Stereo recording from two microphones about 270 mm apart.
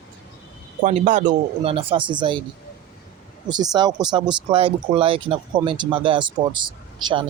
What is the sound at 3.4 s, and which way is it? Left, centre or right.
Speech, centre.